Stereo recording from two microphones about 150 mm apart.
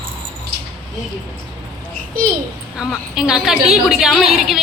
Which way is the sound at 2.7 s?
5° right (ahead or behind).